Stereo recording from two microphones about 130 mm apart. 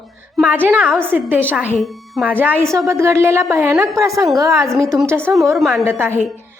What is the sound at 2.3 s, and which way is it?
Speech, 10° right (ahead or behind).